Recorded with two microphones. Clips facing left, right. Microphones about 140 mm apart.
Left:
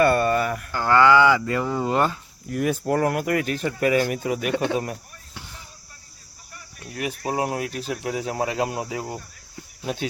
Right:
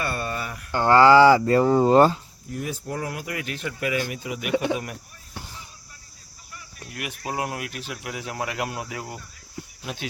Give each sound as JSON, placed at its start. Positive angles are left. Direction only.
{"t": 0.0, "sound": "a sound", "side_deg": 55}
{"t": 0.7, "sound": "speech", "side_deg": -25}
{"t": 2.5, "sound": "speech", "side_deg": 70}
{"t": 6.9, "sound": "speech", "side_deg": 35}
{"t": 8.0, "sound": "cricket", "side_deg": 35}
{"t": 9.8, "sound": "speech", "side_deg": 40}